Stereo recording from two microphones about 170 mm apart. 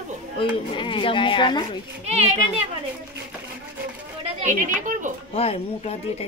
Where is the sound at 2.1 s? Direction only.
40° right (ahead or behind).